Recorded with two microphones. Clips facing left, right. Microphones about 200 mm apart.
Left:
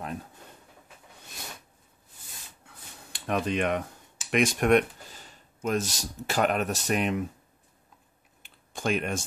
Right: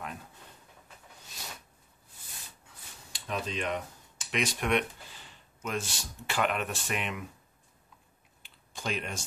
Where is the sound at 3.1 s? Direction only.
60° left (ahead or behind); by 7.2 s 40° left (ahead or behind).